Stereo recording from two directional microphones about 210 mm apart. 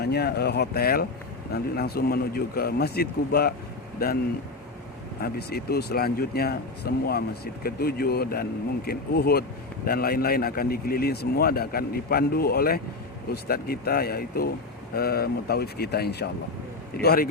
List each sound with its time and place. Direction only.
0.0 s speech: 50° left (ahead or behind)
5.2 s speech: 50° left (ahead or behind)